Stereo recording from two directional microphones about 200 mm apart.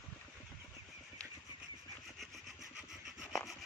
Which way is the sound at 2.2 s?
Centre (ahead or behind).